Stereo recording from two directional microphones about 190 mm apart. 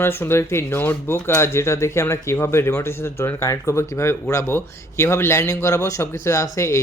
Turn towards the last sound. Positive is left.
turn(degrees=15)  # may be behind; listen again after turning